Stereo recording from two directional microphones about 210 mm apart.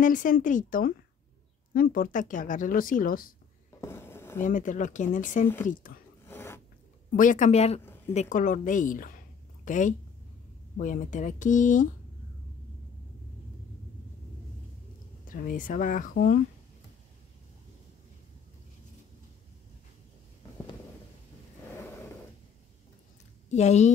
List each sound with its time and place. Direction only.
0.0 s speech: 40° left (ahead or behind)
3.8 s a sound: 10° left (ahead or behind)
4.4 s speech: 40° left (ahead or behind)
6.2 s a sound: 10° left (ahead or behind)
7.1 s a woman's voice: 40° left (ahead or behind)
15.2 s speech: 40° left (ahead or behind)
23.5 s speech: 35° left (ahead or behind)